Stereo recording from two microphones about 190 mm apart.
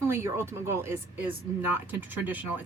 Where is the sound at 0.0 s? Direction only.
15° right (ahead or behind).